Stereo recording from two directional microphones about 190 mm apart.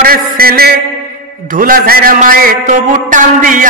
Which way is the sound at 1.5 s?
50° right (ahead or behind).